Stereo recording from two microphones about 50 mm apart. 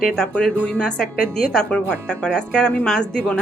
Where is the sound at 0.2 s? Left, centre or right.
Centre.